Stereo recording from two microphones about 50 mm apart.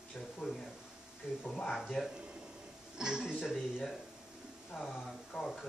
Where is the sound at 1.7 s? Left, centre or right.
Centre.